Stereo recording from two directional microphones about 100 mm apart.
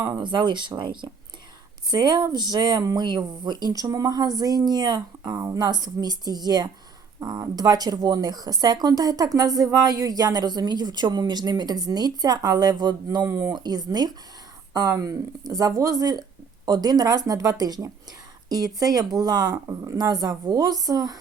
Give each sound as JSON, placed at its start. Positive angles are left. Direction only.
{"t": 0.1, "sound": "speech", "side_deg": -50}